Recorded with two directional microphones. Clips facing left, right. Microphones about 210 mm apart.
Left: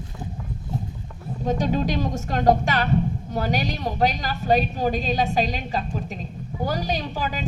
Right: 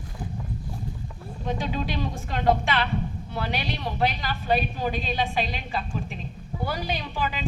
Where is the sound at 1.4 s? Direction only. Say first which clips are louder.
Left 6 dB; 45° left (ahead or behind).